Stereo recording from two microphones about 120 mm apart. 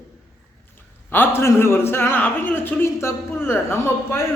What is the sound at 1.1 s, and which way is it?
A man's voice, 20° left (ahead or behind).